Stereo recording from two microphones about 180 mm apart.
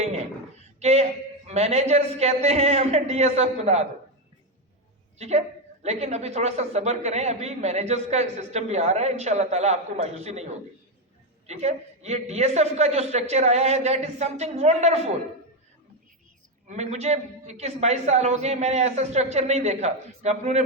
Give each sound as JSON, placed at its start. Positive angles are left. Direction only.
{"t": 0.8, "sound": "speech", "side_deg": -35}
{"t": 5.1, "sound": "a woman's voice", "side_deg": -35}
{"t": 16.6, "sound": "speech", "side_deg": -40}